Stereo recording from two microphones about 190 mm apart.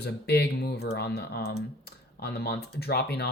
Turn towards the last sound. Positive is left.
turn(degrees=55)  # may be behind; listen again after turning